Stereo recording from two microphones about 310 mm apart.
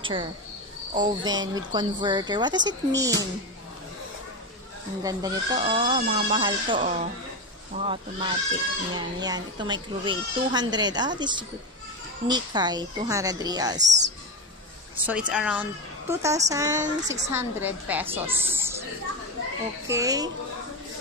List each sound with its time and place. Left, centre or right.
0.0 s speech: centre
5.0 s speech: centre
13.7 s music: right
15.0 s speech: centre
19.9 s speech: centre